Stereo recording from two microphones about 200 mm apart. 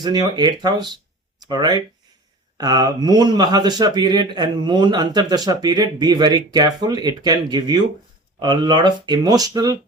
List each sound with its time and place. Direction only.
0.0 s speech: 20° right (ahead or behind)